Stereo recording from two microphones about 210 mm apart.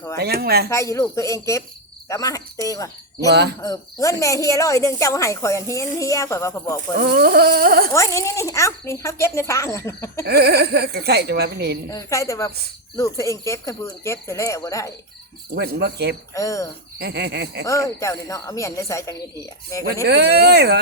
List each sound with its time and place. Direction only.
0.2 s speech: 50° right (ahead or behind)
0.7 s speech: 15° left (ahead or behind)
7.0 s speech: 50° right (ahead or behind)
7.9 s speech: 15° left (ahead or behind)
10.2 s speech: 50° right (ahead or behind)
11.9 s speech: 15° left (ahead or behind)
15.5 s speech: 50° right (ahead or behind)
16.3 s speech: 15° left (ahead or behind)
17.0 s speech: 50° right (ahead or behind)
17.7 s speech: 15° left (ahead or behind)
20.1 s speech: 50° right (ahead or behind)